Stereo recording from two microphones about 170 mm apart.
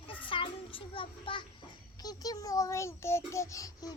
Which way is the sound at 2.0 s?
20° left (ahead or behind).